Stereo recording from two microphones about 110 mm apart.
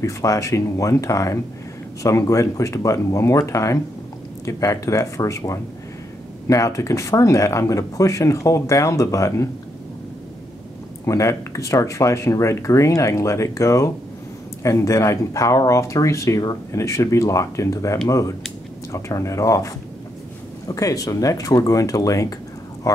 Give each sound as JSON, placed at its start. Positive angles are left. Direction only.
{"t": 0.0, "sound": "speech", "side_deg": 30}
{"t": 11.1, "sound": "speech", "side_deg": 30}